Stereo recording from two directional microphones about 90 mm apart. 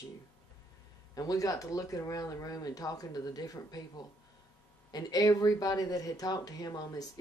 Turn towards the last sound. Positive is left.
turn(degrees=45)  # may be behind; listen again after turning